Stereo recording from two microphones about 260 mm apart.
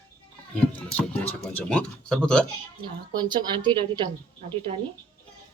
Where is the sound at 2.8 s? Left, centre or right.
Centre.